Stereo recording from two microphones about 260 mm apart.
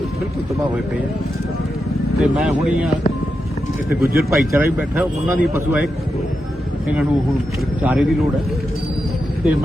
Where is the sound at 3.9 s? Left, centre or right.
Right.